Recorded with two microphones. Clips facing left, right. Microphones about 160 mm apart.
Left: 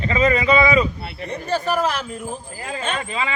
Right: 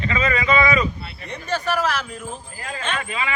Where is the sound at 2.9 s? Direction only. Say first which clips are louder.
Left 2 dB; 25° left (ahead or behind).